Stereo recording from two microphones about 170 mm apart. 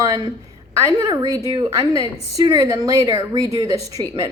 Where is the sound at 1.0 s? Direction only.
20° right (ahead or behind).